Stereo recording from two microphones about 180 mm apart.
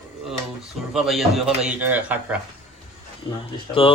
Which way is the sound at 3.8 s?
30° left (ahead or behind).